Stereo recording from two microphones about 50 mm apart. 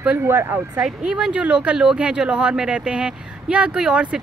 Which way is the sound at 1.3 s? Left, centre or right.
Right.